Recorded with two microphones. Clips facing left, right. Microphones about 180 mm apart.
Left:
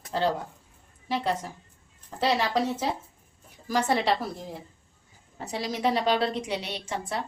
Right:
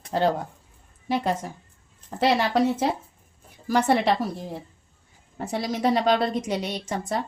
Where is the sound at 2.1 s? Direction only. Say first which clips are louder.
Right 4 dB; 55° right (ahead or behind).